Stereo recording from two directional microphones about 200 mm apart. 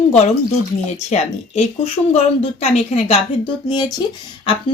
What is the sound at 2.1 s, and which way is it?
Speech, 30° left (ahead or behind).